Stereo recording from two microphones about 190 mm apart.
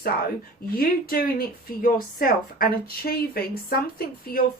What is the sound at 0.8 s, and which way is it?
Speech, 50° left (ahead or behind).